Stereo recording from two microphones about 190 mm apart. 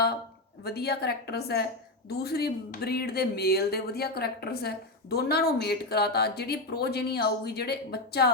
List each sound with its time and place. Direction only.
0.6 s speech: 55° left (ahead or behind)